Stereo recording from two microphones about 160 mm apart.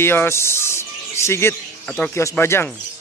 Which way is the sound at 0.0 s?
15° left (ahead or behind).